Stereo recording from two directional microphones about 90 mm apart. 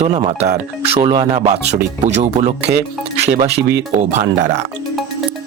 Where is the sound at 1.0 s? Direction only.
55° right (ahead or behind).